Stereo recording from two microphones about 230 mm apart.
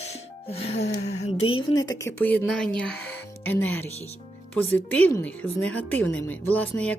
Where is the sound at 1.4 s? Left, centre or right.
Left.